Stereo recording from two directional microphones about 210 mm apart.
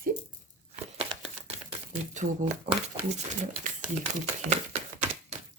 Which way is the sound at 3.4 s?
35° right (ahead or behind).